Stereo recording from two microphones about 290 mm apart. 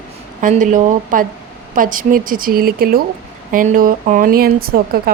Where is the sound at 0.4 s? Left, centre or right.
Right.